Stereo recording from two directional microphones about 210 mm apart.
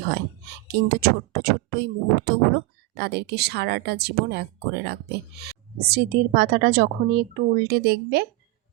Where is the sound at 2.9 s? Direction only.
50° right (ahead or behind).